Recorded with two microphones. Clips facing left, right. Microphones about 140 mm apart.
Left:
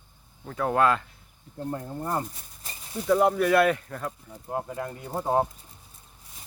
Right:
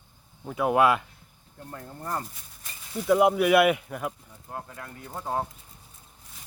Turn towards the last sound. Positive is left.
turn(degrees=25)  # may be behind; listen again after turning